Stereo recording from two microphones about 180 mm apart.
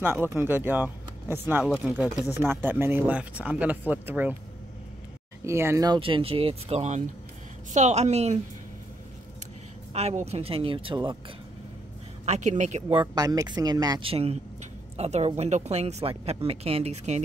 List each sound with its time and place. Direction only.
0.0 s speech: 15° right (ahead or behind)
5.4 s speech: 15° right (ahead or behind); by 8.4 s 35° right (ahead or behind)
9.9 s speech: 35° right (ahead or behind)
12.3 s speech: 40° right (ahead or behind)
13.0 s speech: 20° right (ahead or behind); by 17.2 s 35° right (ahead or behind)